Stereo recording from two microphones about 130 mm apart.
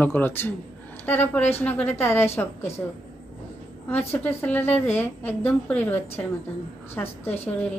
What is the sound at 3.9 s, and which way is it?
Speech, 15° left (ahead or behind).